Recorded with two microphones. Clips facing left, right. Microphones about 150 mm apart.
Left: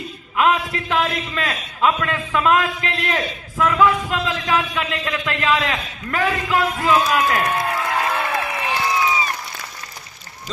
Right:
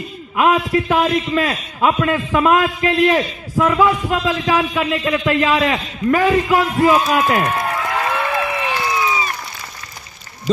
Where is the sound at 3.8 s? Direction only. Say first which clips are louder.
Right 2 dB; 15° right (ahead or behind).